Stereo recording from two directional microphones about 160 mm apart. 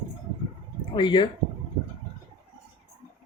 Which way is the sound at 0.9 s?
30° left (ahead or behind).